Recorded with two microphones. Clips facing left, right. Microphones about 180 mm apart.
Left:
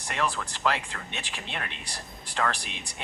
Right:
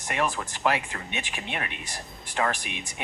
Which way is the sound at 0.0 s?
15° right (ahead or behind).